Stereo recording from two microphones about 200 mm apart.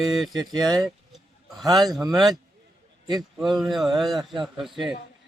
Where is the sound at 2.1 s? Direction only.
Centre (ahead or behind).